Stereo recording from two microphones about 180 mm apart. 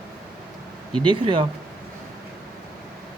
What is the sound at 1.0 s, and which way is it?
Speech, 25° right (ahead or behind).